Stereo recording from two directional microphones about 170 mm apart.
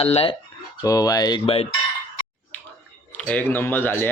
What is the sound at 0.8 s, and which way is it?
Speech, 20° left (ahead or behind).